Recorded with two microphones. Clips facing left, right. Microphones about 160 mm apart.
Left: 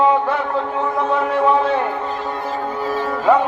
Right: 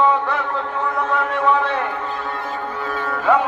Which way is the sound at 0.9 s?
25° left (ahead or behind).